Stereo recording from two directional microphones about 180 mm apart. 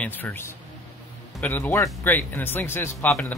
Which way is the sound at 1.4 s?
10° left (ahead or behind).